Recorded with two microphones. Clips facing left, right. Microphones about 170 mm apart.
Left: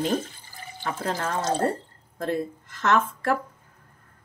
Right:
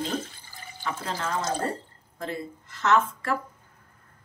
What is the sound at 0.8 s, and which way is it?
A woman's voice, 50° left (ahead or behind).